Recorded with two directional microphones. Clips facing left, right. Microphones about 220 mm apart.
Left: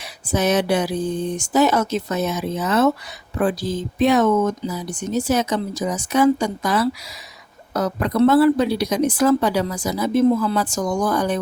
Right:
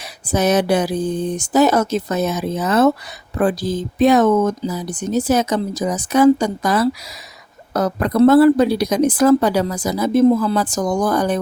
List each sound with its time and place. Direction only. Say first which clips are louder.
0.3 s a woman's voice: right 3 dB; 40° right (ahead or behind)